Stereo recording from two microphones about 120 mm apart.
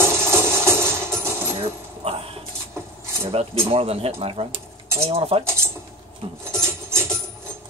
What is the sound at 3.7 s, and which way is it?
Speech, 55° right (ahead or behind).